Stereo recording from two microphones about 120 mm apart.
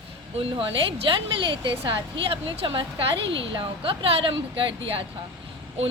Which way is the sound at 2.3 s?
45° right (ahead or behind).